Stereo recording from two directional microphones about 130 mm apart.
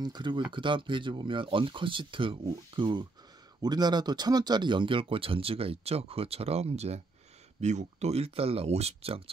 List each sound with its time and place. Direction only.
0.0 s speech: 35° right (ahead or behind); by 9.2 s 50° right (ahead or behind)